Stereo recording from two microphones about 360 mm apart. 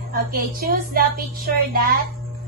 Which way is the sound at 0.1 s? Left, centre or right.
Right.